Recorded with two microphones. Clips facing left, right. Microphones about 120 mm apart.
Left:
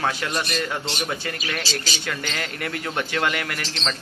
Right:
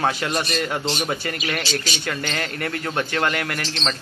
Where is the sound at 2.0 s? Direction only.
5° left (ahead or behind).